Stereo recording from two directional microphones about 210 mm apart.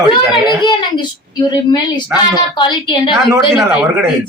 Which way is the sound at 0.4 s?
20° left (ahead or behind).